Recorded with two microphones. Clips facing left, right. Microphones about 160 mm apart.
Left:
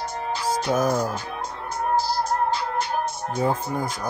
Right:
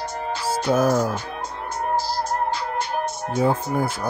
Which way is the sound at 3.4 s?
5° right (ahead or behind).